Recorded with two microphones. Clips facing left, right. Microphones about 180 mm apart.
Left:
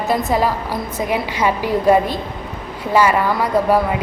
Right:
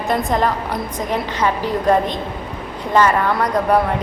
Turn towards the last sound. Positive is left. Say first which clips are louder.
# left 1 dB
turn(degrees=5)  # may be behind; listen again after turning